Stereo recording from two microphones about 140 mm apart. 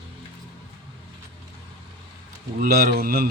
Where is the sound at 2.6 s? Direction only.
90° right.